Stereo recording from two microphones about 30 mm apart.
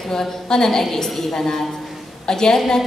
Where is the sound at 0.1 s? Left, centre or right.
Centre.